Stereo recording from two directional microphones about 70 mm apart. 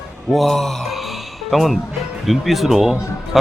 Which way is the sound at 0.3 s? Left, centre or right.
Centre.